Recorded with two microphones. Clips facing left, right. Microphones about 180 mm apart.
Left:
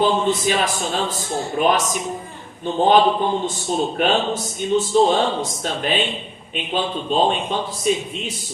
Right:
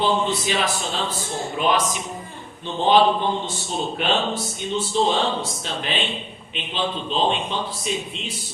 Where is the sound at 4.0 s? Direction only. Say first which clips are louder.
Left 1 dB; 45° left (ahead or behind).